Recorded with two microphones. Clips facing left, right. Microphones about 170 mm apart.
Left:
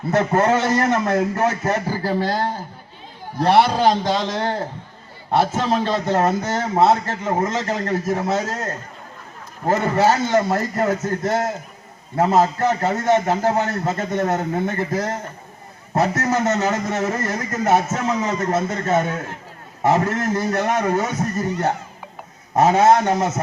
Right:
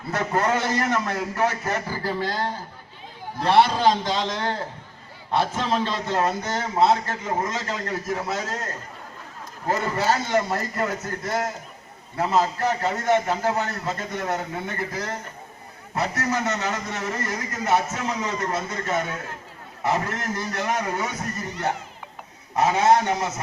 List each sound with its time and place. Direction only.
0.1 s a man's voice: 45° left (ahead or behind)
3.8 s a man's voice: 50° left (ahead or behind)